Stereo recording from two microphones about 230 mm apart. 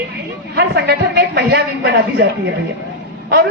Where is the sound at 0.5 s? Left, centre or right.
Right.